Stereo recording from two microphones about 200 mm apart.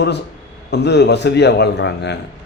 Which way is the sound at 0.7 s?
55° left (ahead or behind).